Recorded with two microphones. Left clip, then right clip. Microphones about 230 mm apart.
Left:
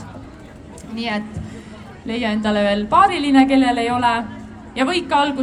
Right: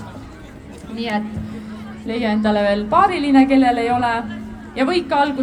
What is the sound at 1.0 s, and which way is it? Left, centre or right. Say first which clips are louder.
A woman's voice: right 1 dB; left.